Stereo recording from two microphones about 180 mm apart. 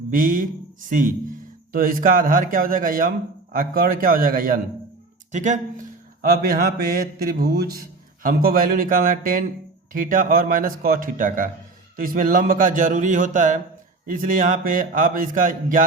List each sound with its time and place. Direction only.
0.1 s speech: 50° right (ahead or behind)
5.3 s speech: 40° right (ahead or behind)
6.2 s mantra: 55° right (ahead or behind)
8.2 s speech: 55° right (ahead or behind)